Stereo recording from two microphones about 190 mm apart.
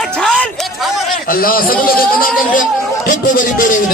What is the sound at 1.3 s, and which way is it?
A man's voice, 50° left (ahead or behind).